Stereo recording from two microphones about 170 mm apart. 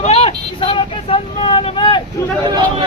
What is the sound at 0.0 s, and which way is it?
Vehicle, 35° left (ahead or behind).